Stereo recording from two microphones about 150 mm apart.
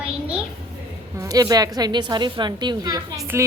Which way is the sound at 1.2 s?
25° right (ahead or behind).